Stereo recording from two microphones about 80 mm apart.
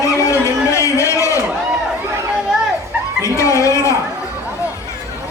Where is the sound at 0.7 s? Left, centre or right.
Left.